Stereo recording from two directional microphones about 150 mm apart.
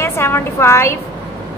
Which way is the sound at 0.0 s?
15° left (ahead or behind).